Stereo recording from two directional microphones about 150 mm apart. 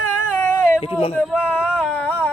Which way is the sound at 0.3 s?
15° left (ahead or behind).